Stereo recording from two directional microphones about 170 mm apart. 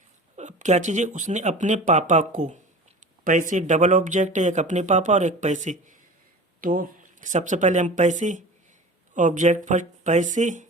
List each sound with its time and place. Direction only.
0.3 s speech: 45° right (ahead or behind)